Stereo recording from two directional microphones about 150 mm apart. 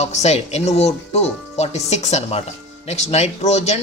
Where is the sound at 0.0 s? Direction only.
50° left (ahead or behind).